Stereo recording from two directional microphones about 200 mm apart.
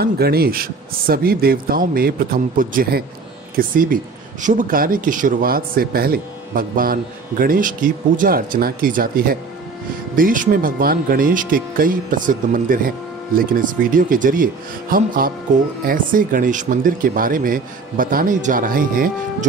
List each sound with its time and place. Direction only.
0.0 s speech: 50° right (ahead or behind)